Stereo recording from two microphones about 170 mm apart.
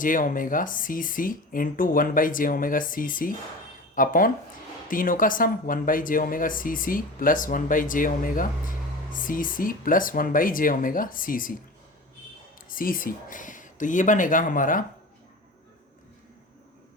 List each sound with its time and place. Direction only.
0.0 s speech: 50° left (ahead or behind)
12.5 s speech: 55° left (ahead or behind)